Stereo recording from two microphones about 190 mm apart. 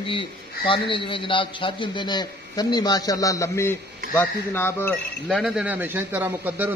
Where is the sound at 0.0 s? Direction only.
30° left (ahead or behind); by 5.4 s 10° left (ahead or behind).